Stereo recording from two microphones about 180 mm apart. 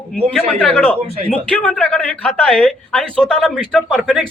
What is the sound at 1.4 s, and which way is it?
Speech, 5° left (ahead or behind).